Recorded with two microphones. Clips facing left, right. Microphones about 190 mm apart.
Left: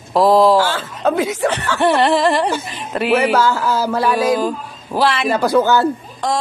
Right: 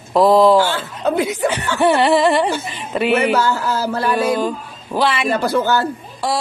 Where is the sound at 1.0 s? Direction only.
85° left.